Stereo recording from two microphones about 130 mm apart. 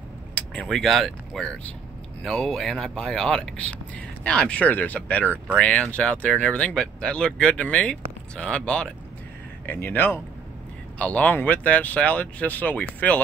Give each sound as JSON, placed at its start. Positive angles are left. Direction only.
{"t": 0.3, "sound": "speech", "side_deg": 5}